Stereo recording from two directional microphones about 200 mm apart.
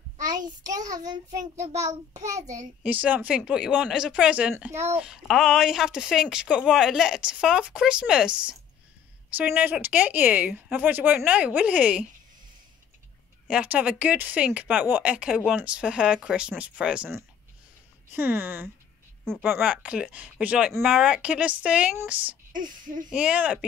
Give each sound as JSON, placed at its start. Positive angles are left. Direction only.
{"t": 0.7, "sound": "child singing", "side_deg": -20}
{"t": 1.4, "sound": "a child's voice", "side_deg": -35}
{"t": 2.2, "sound": "speech", "side_deg": -15}
{"t": 13.5, "sound": "speech", "side_deg": -5}